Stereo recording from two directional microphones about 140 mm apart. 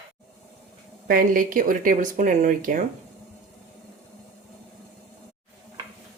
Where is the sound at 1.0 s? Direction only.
85° right; by 2.8 s 70° right (ahead or behind).